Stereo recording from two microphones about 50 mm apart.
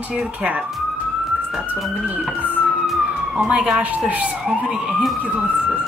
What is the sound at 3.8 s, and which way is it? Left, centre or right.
Speech, right.